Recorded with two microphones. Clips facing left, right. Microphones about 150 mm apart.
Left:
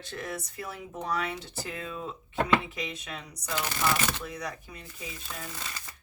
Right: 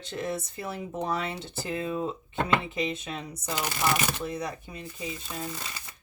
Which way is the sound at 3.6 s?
10° right (ahead or behind).